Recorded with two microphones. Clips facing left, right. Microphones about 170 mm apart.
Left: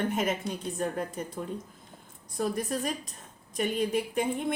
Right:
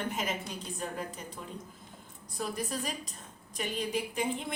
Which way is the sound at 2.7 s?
50° left (ahead or behind).